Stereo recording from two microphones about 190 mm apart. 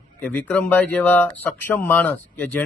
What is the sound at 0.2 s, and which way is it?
Speech, 10° left (ahead or behind).